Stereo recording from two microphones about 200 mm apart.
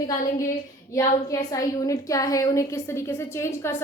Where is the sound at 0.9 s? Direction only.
15° left (ahead or behind).